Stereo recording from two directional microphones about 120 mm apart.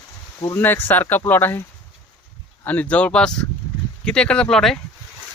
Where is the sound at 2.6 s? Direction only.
10° left (ahead or behind).